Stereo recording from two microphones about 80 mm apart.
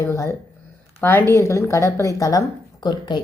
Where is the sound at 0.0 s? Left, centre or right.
Left.